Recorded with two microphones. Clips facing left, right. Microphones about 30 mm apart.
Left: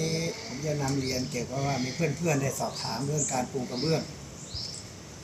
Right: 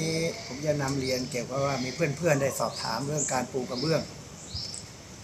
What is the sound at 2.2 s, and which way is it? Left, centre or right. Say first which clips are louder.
Speech: right 6 dB; right.